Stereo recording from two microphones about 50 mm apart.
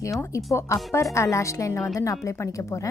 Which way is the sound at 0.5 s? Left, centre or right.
Left.